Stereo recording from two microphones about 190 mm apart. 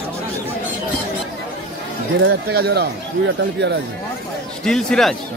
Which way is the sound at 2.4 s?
55° right (ahead or behind).